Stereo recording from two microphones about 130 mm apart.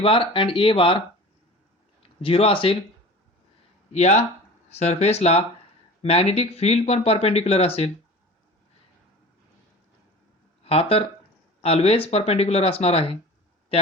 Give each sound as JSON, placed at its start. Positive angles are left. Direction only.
{"t": 0.0, "sound": "speech", "side_deg": 40}
{"t": 2.0, "sound": "speech", "side_deg": 45}
{"t": 3.9, "sound": "speech", "side_deg": 60}
{"t": 10.6, "sound": "speech", "side_deg": 50}